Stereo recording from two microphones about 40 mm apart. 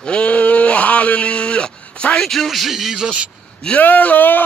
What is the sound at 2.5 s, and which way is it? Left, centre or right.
Speech, centre.